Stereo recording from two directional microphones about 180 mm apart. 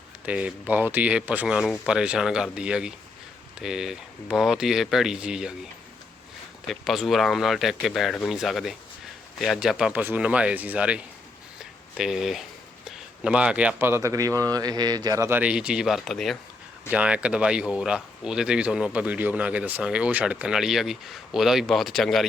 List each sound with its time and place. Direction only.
0.3 s a man's voice: 5° right (ahead or behind)
6.7 s a man's voice: centre (ahead or behind)